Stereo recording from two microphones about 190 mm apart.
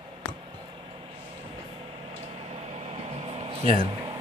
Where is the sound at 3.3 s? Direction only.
30° right (ahead or behind).